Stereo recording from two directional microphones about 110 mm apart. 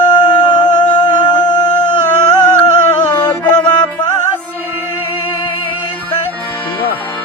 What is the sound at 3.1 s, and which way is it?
Music, 40° left (ahead or behind).